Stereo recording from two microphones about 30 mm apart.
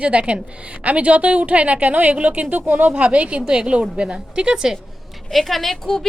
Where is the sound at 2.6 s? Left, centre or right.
Right.